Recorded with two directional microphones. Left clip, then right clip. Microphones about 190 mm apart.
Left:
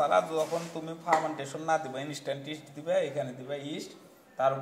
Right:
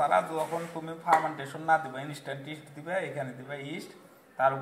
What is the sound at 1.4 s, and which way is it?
A man's voice, 35° left (ahead or behind).